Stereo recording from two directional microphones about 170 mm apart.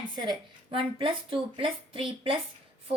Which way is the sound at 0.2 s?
30° right (ahead or behind).